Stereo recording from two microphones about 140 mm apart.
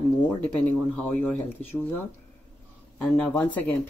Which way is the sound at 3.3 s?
10° left (ahead or behind).